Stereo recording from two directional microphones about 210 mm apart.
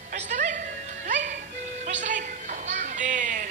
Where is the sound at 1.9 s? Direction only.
35° right (ahead or behind).